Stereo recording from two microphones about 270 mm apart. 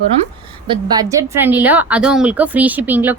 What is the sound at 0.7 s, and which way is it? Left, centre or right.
A woman's voice, centre.